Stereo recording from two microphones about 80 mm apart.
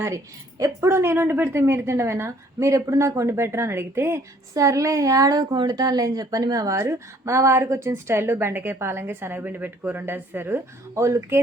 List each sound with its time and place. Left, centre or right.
0.6 s speech: right
6.7 s speech: right